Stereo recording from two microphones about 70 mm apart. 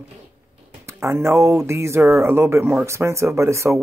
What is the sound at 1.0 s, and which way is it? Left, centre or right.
Speech, right.